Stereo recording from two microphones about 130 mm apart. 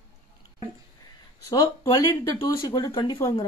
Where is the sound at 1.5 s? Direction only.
30° left (ahead or behind).